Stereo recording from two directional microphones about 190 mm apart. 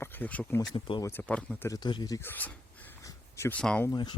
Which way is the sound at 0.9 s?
25° left (ahead or behind).